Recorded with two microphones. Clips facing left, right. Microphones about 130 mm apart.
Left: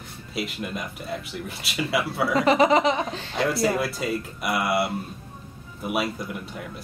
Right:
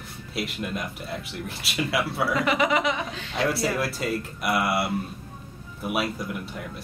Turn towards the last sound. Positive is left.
turn(degrees=0)  # may be behind; listen again after turning